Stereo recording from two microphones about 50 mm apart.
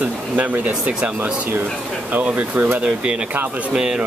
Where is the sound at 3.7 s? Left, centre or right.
Centre.